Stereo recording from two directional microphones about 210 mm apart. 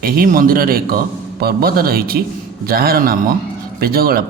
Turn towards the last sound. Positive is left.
turn(degrees=-45)  # may be behind; listen again after turning